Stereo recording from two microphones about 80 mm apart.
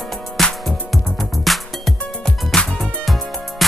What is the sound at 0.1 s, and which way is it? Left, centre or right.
Music, centre.